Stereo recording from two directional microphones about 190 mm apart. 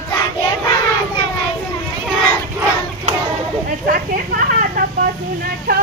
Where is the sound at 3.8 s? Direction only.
50° right (ahead or behind).